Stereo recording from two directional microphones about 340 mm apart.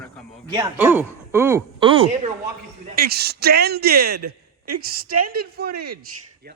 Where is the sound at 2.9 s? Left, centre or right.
Right.